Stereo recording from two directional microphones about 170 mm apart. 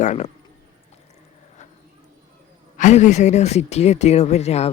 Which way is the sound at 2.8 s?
45° left (ahead or behind).